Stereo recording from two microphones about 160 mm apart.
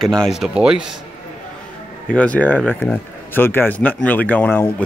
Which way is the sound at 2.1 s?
10° left (ahead or behind).